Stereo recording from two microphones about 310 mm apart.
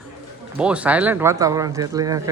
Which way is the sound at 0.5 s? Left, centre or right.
Centre.